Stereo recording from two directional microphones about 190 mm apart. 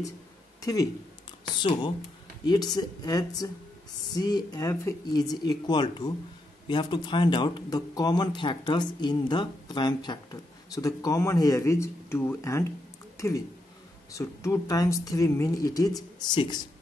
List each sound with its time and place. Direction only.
0.6 s speech: 20° left (ahead or behind)
14.1 s speech: 15° left (ahead or behind)